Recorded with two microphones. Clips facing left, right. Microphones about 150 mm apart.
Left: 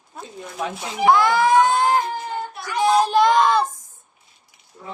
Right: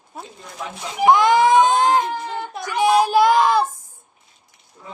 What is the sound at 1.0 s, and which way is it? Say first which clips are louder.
Baby cry: right 2 dB; 20° right (ahead or behind).